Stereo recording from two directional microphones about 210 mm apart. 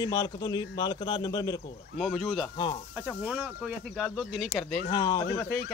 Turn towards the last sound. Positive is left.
turn(degrees=15)  # may be behind; listen again after turning